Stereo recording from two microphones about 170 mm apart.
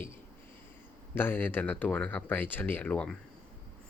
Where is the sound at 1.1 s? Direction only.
10° left (ahead or behind).